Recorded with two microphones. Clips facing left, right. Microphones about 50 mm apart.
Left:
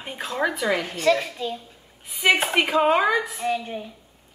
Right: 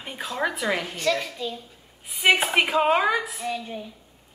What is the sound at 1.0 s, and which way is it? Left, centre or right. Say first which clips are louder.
Speech: left 4 dB; centre.